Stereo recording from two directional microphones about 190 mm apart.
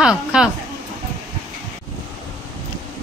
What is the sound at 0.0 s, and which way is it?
Speech, 5° right (ahead or behind).